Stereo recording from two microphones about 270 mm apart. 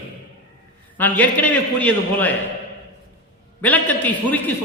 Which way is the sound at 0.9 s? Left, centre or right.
Centre.